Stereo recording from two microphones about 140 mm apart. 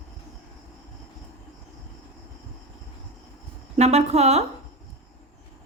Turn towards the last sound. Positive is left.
turn(degrees=-50)  # may be behind; listen again after turning